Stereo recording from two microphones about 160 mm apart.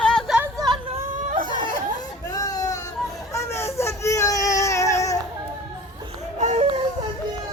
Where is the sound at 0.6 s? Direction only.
25° right (ahead or behind).